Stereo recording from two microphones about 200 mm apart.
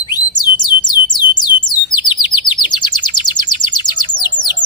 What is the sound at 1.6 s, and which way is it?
Bird, 20° left (ahead or behind).